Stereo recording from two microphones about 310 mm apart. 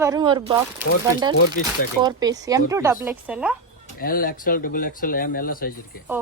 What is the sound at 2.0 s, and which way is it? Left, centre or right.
Speech, centre.